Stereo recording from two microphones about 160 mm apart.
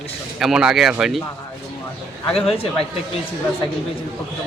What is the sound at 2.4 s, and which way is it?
Speech, 35° left (ahead or behind).